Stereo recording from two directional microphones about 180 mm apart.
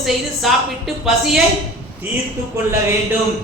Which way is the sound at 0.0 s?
Centre (ahead or behind).